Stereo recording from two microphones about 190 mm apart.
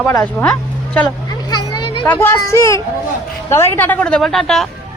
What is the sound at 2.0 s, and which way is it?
A woman's voice, 10° left (ahead or behind).